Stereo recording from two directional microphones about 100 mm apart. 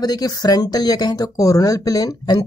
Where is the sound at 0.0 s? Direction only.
40° left (ahead or behind).